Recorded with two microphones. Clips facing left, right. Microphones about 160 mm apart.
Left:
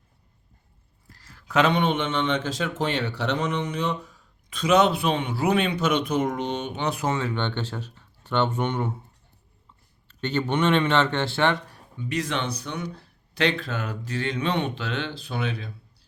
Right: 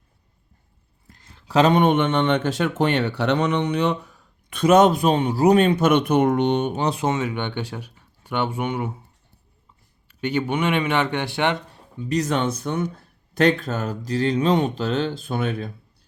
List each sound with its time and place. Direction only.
1.1 s a sound: 20° right (ahead or behind)
1.7 s speech: 55° right (ahead or behind)
6.7 s speech: 30° right (ahead or behind); by 8.9 s 10° right (ahead or behind)
10.1 s speech: 10° right (ahead or behind)
11.9 s speech: 40° right (ahead or behind)